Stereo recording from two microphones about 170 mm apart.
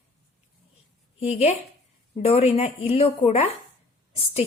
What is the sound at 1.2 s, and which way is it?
A woman's voice, 40° left (ahead or behind).